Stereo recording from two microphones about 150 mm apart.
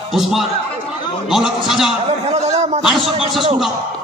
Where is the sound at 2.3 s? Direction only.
50° right (ahead or behind).